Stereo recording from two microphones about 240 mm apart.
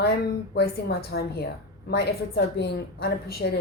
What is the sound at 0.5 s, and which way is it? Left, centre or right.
A woman's voice, left.